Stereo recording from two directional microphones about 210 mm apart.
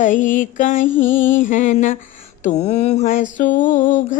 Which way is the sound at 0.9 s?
10° left (ahead or behind).